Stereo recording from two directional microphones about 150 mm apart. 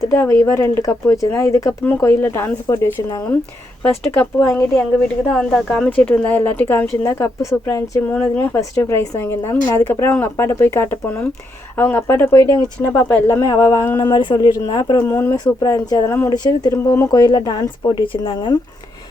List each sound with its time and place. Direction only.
0.1 s speech: 20° left (ahead or behind)
14.0 s speech: 30° left (ahead or behind)
15.0 s speech: 15° left (ahead or behind)